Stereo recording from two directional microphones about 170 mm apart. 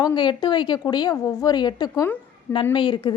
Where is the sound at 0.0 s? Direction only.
25° left (ahead or behind).